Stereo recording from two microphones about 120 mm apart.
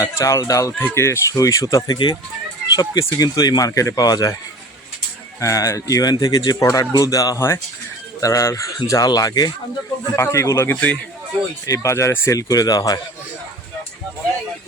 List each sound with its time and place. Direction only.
0.0 s speech: 25° left (ahead or behind)
5.4 s speech: 25° left (ahead or behind)
11.6 s speech: 25° left (ahead or behind)